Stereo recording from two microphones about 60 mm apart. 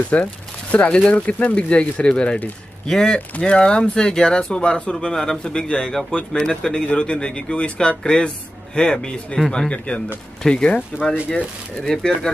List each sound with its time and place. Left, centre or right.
0.1 s speech: left